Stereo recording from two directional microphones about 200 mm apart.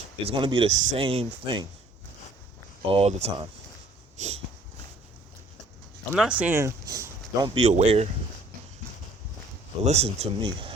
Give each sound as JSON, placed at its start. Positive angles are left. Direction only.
{"t": 0.3, "sound": "speech", "side_deg": -25}
{"t": 2.8, "sound": "speech", "side_deg": -30}
{"t": 6.1, "sound": "speech", "side_deg": -5}
{"t": 7.5, "sound": "speech", "side_deg": -35}
{"t": 9.8, "sound": "speech", "side_deg": -35}